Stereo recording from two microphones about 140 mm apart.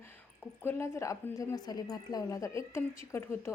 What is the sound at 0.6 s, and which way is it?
A woman's voice, 15° left (ahead or behind).